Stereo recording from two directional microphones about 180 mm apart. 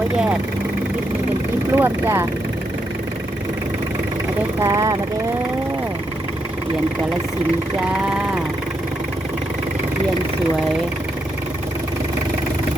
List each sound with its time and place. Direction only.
1.7 s speech: 10° right (ahead or behind)
4.6 s speech: 20° right (ahead or behind)